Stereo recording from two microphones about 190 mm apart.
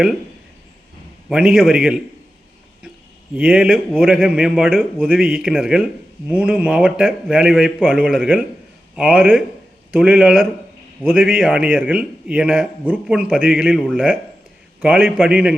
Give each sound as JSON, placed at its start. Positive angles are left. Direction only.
{"t": 1.3, "sound": "a man's voice", "side_deg": -5}
{"t": 3.3, "sound": "a man's voice", "side_deg": -5}